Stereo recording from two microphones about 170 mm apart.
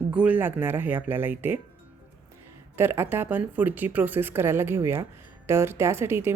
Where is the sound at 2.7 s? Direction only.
15° right (ahead or behind).